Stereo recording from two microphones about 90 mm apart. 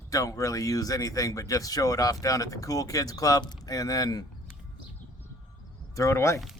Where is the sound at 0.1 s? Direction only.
40° left (ahead or behind).